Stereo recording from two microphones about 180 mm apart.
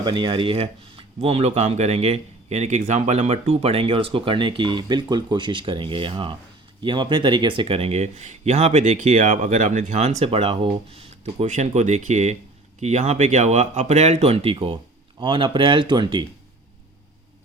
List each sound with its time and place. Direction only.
0.0 s speech: 25° right (ahead or behind)